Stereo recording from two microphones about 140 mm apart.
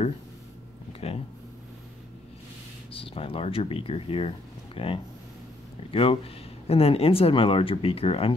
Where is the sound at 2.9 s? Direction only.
40° left (ahead or behind).